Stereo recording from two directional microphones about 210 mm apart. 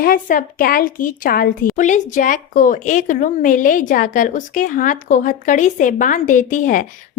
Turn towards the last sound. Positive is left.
turn(degrees=40)  # may be behind; listen again after turning